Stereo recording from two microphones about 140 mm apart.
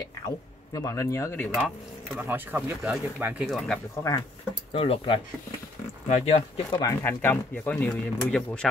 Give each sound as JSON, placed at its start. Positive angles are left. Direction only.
{"t": 0.7, "sound": "speech", "side_deg": 20}
{"t": 2.1, "sound": "speech", "side_deg": -10}
{"t": 3.4, "sound": "speech", "side_deg": 5}
{"t": 4.7, "sound": "speech", "side_deg": 45}
{"t": 6.7, "sound": "speech", "side_deg": 25}